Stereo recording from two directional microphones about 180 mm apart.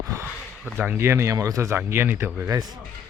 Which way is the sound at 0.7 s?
10° right (ahead or behind).